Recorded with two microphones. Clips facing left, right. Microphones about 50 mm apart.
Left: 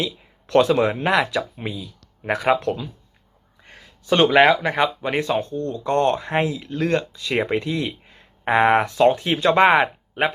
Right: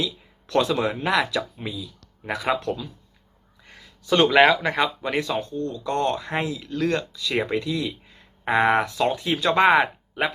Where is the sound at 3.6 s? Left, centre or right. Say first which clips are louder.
Left 2 dB; left.